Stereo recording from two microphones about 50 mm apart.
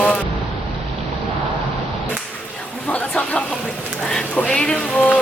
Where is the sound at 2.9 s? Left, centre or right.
Left.